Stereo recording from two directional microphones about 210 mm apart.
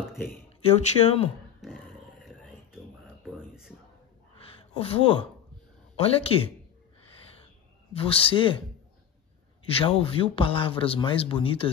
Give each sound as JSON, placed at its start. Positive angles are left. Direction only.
{"t": 0.6, "sound": "a man's voice", "side_deg": 30}
{"t": 3.3, "sound": "a sound", "side_deg": -5}
{"t": 4.4, "sound": "a sound", "side_deg": 25}
{"t": 5.9, "sound": "a man's voice", "side_deg": 25}
{"t": 7.9, "sound": "a man's voice", "side_deg": 25}
{"t": 9.7, "sound": "a man's voice", "side_deg": 25}